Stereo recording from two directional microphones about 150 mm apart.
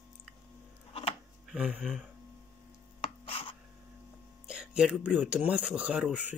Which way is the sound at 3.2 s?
35° left (ahead or behind).